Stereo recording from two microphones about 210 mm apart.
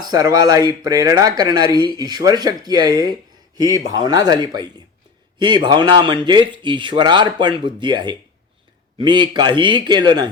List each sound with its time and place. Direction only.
0.0 s speech: 20° right (ahead or behind)